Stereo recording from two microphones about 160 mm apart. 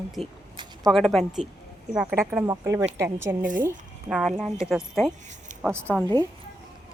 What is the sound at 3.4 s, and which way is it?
Speech, 60° right (ahead or behind).